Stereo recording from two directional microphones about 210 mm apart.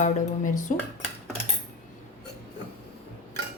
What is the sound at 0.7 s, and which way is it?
Speech, 35° left (ahead or behind).